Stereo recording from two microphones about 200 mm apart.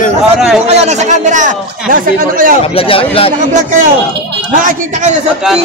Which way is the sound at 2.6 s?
30° left (ahead or behind).